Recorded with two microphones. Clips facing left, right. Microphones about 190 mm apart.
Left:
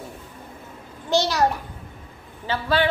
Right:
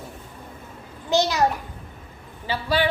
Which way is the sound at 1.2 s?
15° right (ahead or behind).